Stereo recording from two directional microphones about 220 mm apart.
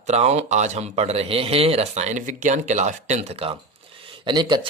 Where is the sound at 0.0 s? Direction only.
30° right (ahead or behind).